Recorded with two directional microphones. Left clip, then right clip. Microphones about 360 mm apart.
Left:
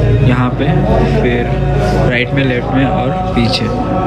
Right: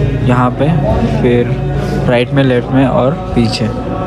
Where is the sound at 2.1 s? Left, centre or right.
Centre.